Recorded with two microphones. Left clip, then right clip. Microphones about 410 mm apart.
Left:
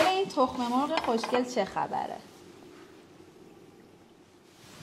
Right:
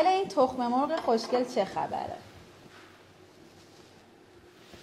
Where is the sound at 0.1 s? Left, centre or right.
Left.